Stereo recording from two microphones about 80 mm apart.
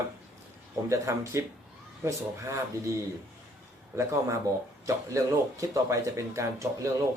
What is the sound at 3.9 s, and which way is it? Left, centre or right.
Speech, right.